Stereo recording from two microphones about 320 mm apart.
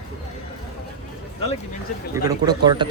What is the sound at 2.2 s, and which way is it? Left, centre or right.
Speech, centre.